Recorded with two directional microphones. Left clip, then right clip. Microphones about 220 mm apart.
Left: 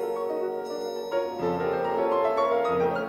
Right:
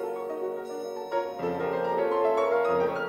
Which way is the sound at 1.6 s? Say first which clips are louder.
Even; centre (ahead or behind).